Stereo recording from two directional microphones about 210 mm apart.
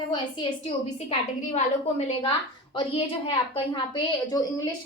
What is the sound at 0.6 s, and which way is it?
A woman's voice, 30° left (ahead or behind).